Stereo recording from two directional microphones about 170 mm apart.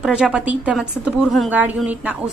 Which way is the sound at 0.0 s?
5° right (ahead or behind).